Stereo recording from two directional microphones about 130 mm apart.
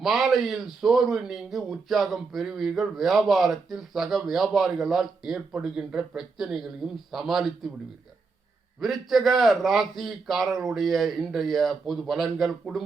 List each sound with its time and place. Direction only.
0.0 s a man's voice: centre (ahead or behind)
8.8 s a man's voice: centre (ahead or behind)